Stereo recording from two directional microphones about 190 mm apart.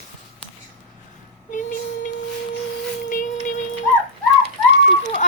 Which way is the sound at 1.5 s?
45° left (ahead or behind).